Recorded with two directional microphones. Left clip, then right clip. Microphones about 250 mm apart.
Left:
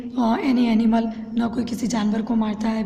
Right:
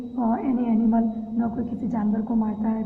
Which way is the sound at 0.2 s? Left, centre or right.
Left.